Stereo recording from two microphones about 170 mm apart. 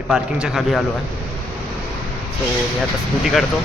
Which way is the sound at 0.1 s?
Centre (ahead or behind).